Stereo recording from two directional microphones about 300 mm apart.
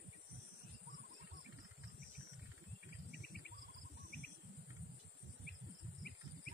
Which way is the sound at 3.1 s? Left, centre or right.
Left.